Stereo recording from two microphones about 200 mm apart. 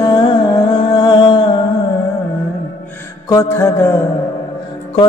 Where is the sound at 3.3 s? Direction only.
15° left (ahead or behind).